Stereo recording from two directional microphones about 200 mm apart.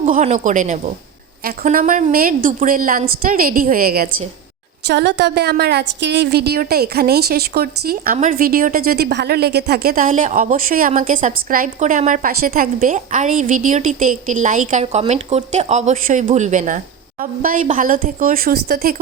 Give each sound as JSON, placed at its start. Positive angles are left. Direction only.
{"t": 0.0, "sound": "a woman's voice", "side_deg": -35}
{"t": 4.9, "sound": "a woman's voice", "side_deg": -60}